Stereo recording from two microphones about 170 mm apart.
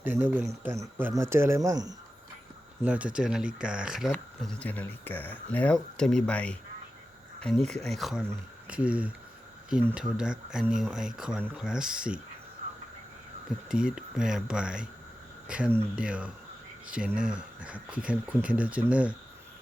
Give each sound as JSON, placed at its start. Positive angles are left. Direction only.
{"t": 0.0, "sound": "speech", "side_deg": -10}
{"t": 2.8, "sound": "speech", "side_deg": -10}
{"t": 4.1, "sound": "speech", "side_deg": 10}
{"t": 13.7, "sound": "speech", "side_deg": -5}